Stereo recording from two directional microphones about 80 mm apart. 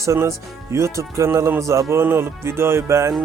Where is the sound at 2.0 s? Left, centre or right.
Right.